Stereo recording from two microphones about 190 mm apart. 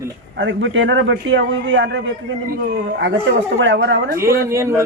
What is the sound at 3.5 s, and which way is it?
Speech, 75° right (ahead or behind).